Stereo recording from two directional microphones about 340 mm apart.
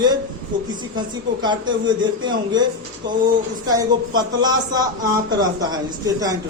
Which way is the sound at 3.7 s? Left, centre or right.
Centre.